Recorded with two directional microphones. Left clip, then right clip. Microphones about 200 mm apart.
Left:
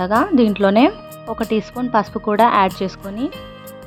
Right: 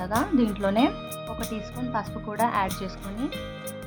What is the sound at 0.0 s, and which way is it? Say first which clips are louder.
Speech: left 10 dB; 35° left (ahead or behind).